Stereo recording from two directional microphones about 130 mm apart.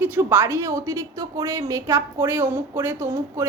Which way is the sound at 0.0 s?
15° right (ahead or behind).